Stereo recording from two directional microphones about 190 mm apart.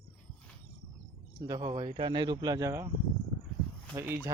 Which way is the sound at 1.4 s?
20° right (ahead or behind).